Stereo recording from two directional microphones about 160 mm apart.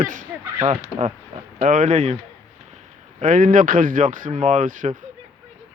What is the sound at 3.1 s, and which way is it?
Speech, 55° right (ahead or behind).